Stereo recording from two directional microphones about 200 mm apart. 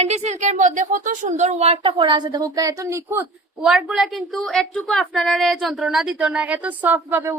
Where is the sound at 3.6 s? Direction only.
Centre (ahead or behind).